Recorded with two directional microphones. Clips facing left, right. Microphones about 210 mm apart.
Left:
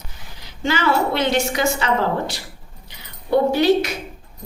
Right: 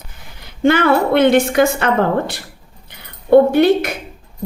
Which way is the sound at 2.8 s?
55° right (ahead or behind).